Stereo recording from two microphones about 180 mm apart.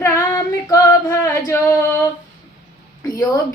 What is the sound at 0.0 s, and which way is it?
Female singing, 15° left (ahead or behind).